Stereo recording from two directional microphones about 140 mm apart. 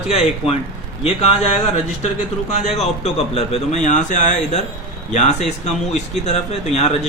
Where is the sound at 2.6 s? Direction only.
50° left (ahead or behind).